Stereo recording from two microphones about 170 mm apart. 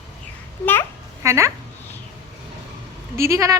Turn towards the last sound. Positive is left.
turn(degrees=-15)  # may be behind; listen again after turning